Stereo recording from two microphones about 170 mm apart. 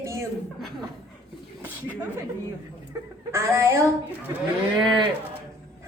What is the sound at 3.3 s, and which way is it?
Speech, 15° right (ahead or behind).